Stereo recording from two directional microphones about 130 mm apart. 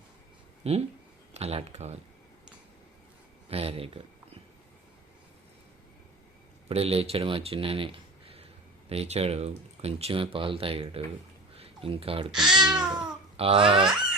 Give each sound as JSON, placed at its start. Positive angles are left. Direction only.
{"t": 0.6, "sound": "speech", "side_deg": -50}
{"t": 3.5, "sound": "speech", "side_deg": -50}
{"t": 6.7, "sound": "speech", "side_deg": -50}
{"t": 8.9, "sound": "speech", "side_deg": -50}
{"t": 12.3, "sound": "babbling", "side_deg": -5}
{"t": 13.3, "sound": "speech", "side_deg": -45}